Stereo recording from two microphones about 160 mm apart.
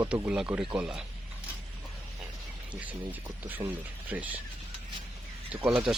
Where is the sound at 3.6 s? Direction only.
20° right (ahead or behind).